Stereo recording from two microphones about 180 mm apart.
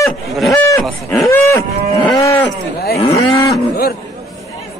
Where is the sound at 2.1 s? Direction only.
15° left (ahead or behind).